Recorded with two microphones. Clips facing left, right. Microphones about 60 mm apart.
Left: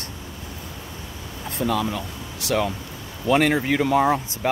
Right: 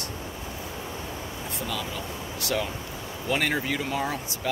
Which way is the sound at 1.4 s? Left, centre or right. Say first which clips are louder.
Left 10 dB; left.